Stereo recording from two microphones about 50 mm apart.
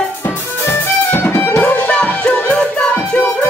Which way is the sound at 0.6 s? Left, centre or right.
Left.